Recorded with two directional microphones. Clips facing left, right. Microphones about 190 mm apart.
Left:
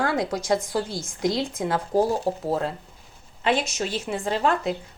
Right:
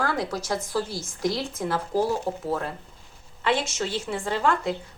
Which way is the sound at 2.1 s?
30° left (ahead or behind).